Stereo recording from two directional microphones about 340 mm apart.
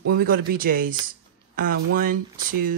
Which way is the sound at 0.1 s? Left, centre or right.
Right.